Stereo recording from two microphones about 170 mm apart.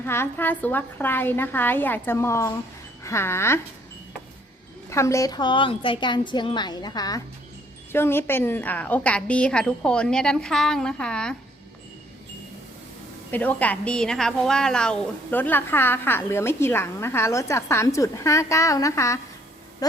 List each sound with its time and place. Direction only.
0.0 s a woman's voice: 15° left (ahead or behind)
4.9 s a woman's voice: 15° left (ahead or behind)
13.3 s a woman's voice: 10° left (ahead or behind)